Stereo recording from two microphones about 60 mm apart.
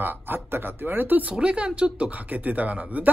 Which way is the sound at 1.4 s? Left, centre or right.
Centre.